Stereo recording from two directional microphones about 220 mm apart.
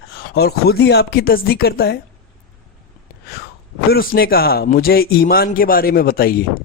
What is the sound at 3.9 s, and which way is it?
Speech, 45° left (ahead or behind).